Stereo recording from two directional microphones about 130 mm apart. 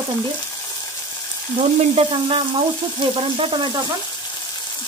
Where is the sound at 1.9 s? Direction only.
45° right (ahead or behind).